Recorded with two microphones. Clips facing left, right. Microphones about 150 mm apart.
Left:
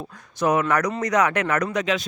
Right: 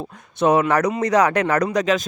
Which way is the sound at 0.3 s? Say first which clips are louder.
Right 4 dB; 25° right (ahead or behind).